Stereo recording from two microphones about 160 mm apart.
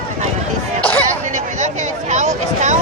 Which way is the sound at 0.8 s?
10° left (ahead or behind).